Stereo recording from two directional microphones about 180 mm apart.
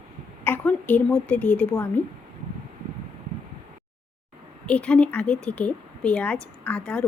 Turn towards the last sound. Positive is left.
turn(degrees=5)  # may be behind; listen again after turning